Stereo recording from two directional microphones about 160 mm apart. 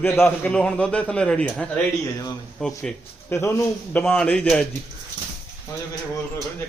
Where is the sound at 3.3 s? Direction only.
15° left (ahead or behind).